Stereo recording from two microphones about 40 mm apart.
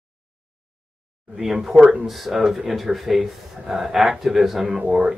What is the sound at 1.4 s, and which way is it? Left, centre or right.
Speech, centre.